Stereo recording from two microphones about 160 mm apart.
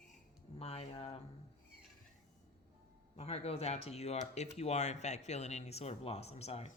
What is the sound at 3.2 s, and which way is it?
Speech, 40° left (ahead or behind).